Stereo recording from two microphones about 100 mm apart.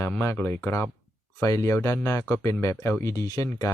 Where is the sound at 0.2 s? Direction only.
25° left (ahead or behind).